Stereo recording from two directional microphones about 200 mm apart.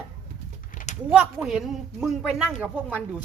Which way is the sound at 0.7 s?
40° left (ahead or behind).